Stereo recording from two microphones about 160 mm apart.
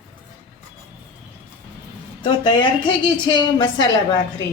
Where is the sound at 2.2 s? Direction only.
30° left (ahead or behind).